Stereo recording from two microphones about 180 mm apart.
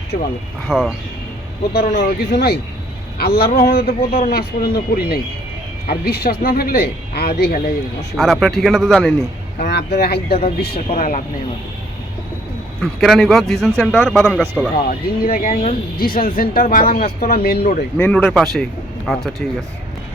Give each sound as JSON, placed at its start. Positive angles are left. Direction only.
{"t": 0.1, "sound": "speech", "side_deg": 50}
{"t": 0.7, "sound": "a man's voice", "side_deg": 0}
{"t": 1.7, "sound": "speech", "side_deg": 60}
{"t": 8.1, "sound": "a man's voice", "side_deg": 0}
{"t": 9.6, "sound": "speech", "side_deg": 65}
{"t": 10.8, "sound": "speech", "side_deg": 45}
{"t": 12.8, "sound": "a man's voice", "side_deg": 0}
{"t": 14.8, "sound": "speech", "side_deg": 50}
{"t": 17.9, "sound": "a man's voice", "side_deg": 10}